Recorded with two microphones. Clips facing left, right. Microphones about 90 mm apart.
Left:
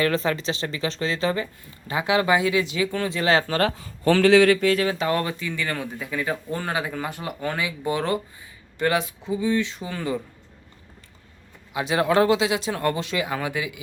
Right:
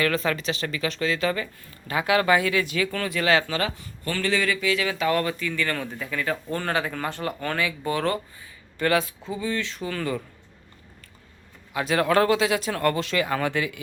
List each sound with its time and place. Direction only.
0.0 s speech: 30° left (ahead or behind)
4.1 s speech: 90° left; by 10.2 s 20° left (ahead or behind)
11.7 s speech: 20° left (ahead or behind)